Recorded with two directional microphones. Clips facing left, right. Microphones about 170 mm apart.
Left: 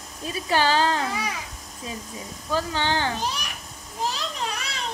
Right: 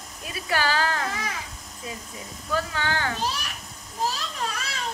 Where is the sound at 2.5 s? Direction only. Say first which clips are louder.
Left 2 dB; 25° left (ahead or behind).